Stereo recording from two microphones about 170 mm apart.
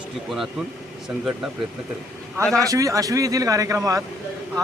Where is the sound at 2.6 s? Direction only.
20° right (ahead or behind).